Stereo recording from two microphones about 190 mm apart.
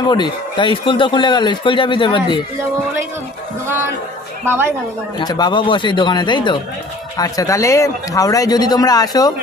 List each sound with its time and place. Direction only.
0.1 s speech: 25° left (ahead or behind)
5.2 s speech: 20° left (ahead or behind)